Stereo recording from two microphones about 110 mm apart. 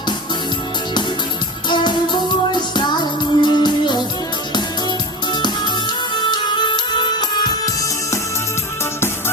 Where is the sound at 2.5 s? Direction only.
40° left (ahead or behind).